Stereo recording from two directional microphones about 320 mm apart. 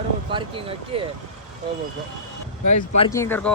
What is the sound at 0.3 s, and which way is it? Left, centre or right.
Speech, centre.